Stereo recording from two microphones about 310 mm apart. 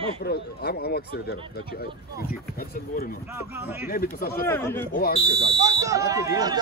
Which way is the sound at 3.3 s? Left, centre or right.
Centre.